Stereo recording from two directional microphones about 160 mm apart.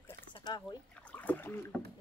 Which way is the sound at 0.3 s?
25° left (ahead or behind).